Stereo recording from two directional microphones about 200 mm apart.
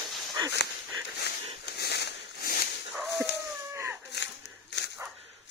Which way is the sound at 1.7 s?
55° left (ahead or behind).